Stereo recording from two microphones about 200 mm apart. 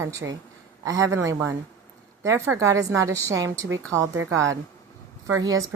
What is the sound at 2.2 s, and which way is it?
Speech, 15° right (ahead or behind).